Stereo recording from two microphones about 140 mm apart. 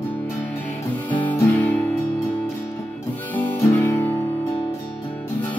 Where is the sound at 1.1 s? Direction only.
10° left (ahead or behind).